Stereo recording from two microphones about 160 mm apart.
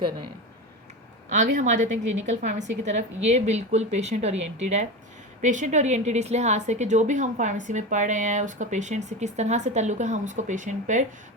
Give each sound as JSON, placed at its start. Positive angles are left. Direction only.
{"t": 1.3, "sound": "a woman's voice", "side_deg": -50}